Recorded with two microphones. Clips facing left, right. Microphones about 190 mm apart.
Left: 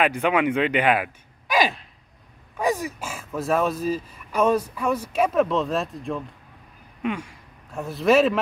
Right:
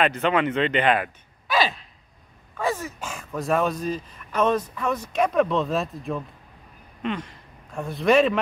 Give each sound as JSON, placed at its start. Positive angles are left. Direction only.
{"t": 0.0, "sound": "speech", "side_deg": 10}
{"t": 7.0, "sound": "a man's voice", "side_deg": 10}